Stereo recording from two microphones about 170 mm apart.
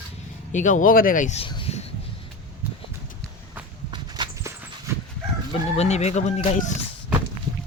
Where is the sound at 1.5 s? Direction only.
30° left (ahead or behind).